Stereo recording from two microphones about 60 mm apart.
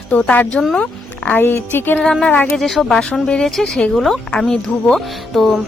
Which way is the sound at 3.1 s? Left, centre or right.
Centre.